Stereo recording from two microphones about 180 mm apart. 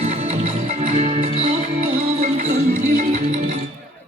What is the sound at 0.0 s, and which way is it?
Music, 35° right (ahead or behind).